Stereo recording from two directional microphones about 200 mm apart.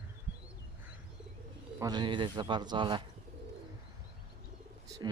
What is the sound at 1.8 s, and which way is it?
Speech, 20° right (ahead or behind).